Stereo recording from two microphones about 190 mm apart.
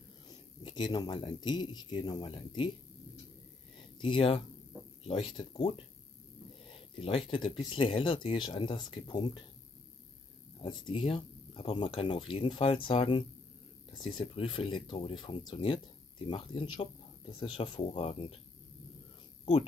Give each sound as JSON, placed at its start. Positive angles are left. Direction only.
{"t": 0.3, "sound": "speech", "side_deg": 25}
{"t": 4.0, "sound": "speech", "side_deg": 25}
{"t": 6.7, "sound": "speech", "side_deg": 25}
{"t": 10.6, "sound": "speech", "side_deg": 25}